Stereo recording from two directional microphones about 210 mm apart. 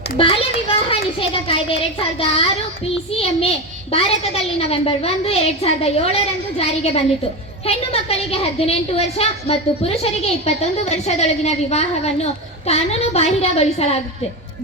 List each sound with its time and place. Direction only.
0.2 s a child's voice: 25° left (ahead or behind)
2.2 s a woman's voice: 25° left (ahead or behind)